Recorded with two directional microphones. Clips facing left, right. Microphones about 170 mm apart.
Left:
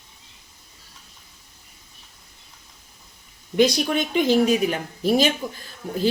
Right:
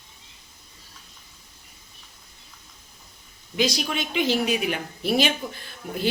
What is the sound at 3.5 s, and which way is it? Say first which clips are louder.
A woman's voice: left 6 dB; 55° left (ahead or behind).